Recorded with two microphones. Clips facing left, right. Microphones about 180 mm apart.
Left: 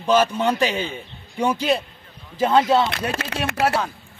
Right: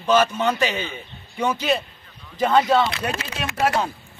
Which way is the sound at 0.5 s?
35° left (ahead or behind).